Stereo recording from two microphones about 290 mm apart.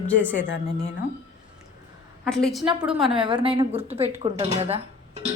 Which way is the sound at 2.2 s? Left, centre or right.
Centre.